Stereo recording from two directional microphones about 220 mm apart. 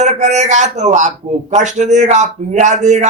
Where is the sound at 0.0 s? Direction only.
30° right (ahead or behind).